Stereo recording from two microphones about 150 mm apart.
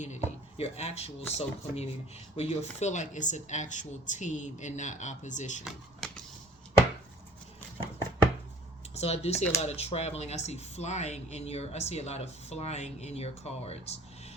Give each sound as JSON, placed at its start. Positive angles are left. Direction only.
{"t": 0.0, "sound": "speech", "side_deg": 45}
{"t": 5.6, "sound": "a sound", "side_deg": 5}
{"t": 9.0, "sound": "speech", "side_deg": 45}